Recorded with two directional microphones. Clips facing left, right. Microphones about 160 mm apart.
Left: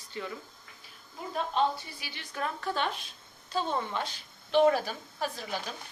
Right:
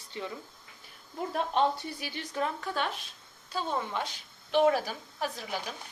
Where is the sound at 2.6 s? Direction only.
5° right (ahead or behind).